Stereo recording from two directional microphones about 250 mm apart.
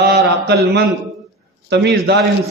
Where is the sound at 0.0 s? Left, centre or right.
Right.